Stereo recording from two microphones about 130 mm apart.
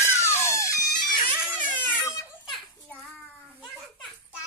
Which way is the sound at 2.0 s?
20° left (ahead or behind).